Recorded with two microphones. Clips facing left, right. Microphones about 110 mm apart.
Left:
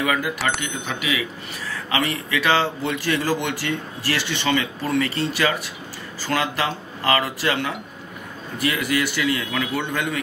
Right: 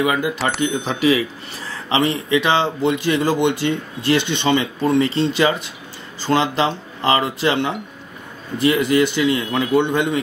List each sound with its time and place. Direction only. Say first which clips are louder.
0.0 s speech: right 3 dB; 25° right (ahead or behind)